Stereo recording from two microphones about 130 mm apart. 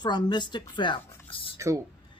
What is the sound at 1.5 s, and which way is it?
Speech, 25° right (ahead or behind).